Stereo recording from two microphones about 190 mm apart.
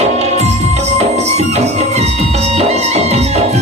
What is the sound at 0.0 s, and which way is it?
Music, 35° right (ahead or behind).